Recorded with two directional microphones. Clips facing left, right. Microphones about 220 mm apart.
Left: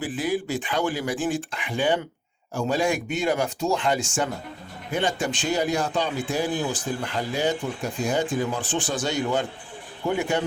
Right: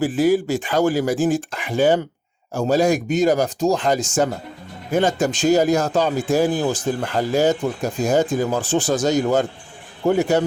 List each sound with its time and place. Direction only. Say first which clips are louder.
0.0 s speech: right 9 dB; 45° right (ahead or behind)